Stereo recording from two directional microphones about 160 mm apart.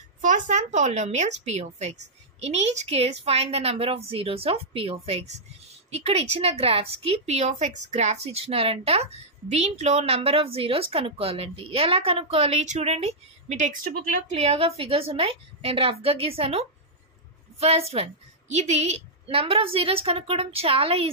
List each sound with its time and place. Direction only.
0.2 s a woman's voice: 50° right (ahead or behind)